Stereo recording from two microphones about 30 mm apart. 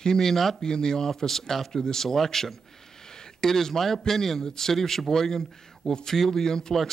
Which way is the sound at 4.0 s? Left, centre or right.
Centre.